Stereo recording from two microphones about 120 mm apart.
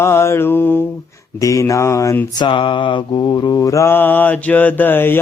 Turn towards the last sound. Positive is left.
turn(degrees=15)  # may be behind; listen again after turning